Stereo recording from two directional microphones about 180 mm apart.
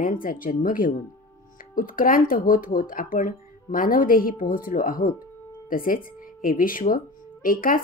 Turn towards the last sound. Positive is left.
turn(degrees=50)  # may be behind; listen again after turning